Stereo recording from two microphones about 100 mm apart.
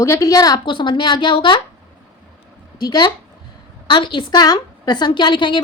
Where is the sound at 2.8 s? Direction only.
40° left (ahead or behind).